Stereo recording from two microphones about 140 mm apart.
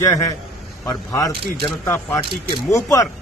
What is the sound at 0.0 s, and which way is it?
A man's voice, 25° left (ahead or behind).